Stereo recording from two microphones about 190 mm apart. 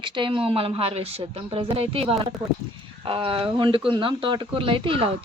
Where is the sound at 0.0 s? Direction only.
25° right (ahead or behind).